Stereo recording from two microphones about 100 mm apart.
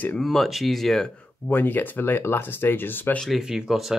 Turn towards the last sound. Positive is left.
turn(degrees=-5)  # may be behind; listen again after turning